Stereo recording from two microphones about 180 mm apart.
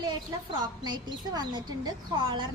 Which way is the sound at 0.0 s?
25° right (ahead or behind).